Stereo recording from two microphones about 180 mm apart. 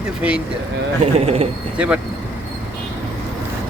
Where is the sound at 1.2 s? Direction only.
35° right (ahead or behind).